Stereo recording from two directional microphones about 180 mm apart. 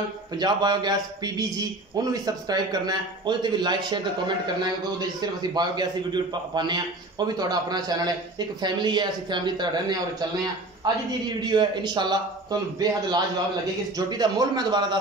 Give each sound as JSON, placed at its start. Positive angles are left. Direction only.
{"t": 0.4, "sound": "a man's voice", "side_deg": -25}
{"t": 5.2, "sound": "a man's voice", "side_deg": -25}